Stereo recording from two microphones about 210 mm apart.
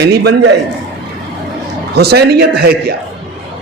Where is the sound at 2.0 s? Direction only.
50° right (ahead or behind).